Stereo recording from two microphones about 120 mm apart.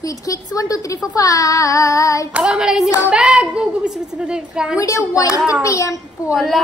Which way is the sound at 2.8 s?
20° left (ahead or behind).